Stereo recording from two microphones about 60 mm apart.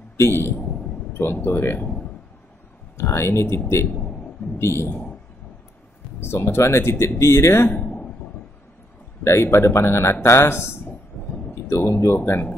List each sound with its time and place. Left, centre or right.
0.2 s speech: left
3.0 s a man's voice: left
6.2 s speech: left
9.2 s speech: left
11.1 s a sound: left
11.6 s speech: left